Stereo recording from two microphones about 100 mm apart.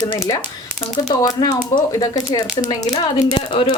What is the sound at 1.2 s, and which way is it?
Speech, 35° left (ahead or behind).